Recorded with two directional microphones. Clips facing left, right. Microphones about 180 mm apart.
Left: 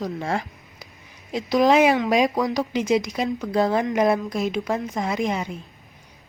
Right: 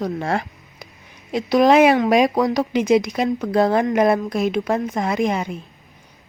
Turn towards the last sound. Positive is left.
turn(degrees=-60)  # may be behind; listen again after turning